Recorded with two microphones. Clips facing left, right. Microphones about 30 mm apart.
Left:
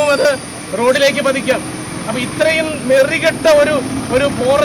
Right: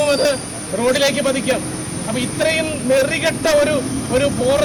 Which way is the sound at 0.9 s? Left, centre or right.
Centre.